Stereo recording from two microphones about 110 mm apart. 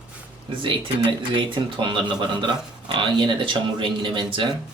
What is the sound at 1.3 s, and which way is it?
Speech, 50° right (ahead or behind).